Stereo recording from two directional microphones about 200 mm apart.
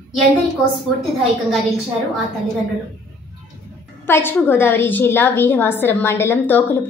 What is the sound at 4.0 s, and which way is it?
A woman's voice, 10° left (ahead or behind).